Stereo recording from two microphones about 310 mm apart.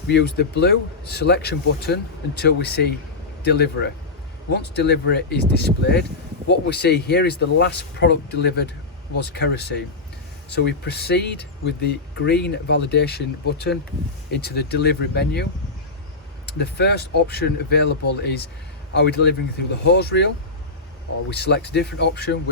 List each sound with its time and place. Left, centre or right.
0.1 s speech: left
16.5 s speech: left